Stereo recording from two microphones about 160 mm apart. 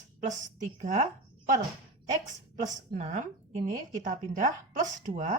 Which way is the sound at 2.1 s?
50° right (ahead or behind).